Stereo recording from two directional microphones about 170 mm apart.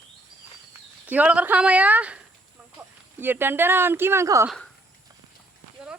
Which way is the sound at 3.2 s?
10° right (ahead or behind).